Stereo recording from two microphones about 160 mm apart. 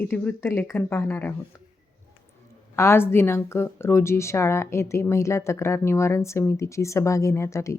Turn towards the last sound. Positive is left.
turn(degrees=20)  # may be behind; listen again after turning